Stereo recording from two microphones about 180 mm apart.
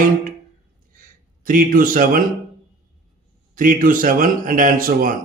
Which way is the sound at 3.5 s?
50° right (ahead or behind).